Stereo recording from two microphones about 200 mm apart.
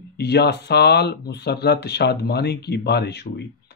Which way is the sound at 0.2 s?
55° left (ahead or behind).